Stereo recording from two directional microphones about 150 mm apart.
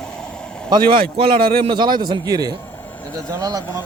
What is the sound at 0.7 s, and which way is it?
Speech, 30° right (ahead or behind).